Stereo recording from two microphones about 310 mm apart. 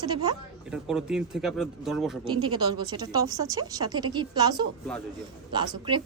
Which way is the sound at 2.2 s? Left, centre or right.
Centre.